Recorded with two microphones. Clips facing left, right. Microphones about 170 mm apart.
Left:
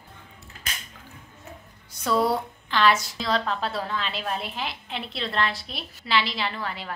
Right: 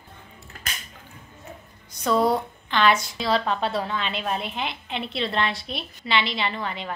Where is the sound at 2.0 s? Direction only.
20° right (ahead or behind).